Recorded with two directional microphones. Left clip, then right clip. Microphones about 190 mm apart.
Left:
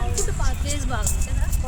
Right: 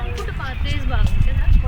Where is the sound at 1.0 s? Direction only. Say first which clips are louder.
Right 1 dB; 60° left (ahead or behind).